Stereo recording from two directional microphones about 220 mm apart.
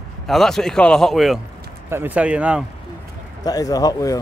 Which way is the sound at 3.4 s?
15° left (ahead or behind).